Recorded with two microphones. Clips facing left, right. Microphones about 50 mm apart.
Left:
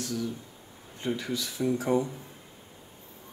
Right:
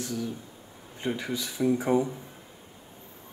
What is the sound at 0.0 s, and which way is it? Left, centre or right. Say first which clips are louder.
Speech: even; centre.